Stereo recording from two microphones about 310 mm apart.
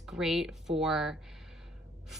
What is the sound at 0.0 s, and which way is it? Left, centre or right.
A woman's voice, centre.